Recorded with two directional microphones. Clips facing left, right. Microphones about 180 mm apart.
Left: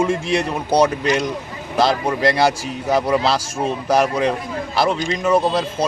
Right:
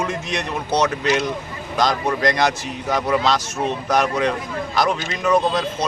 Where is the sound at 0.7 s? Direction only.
10° left (ahead or behind).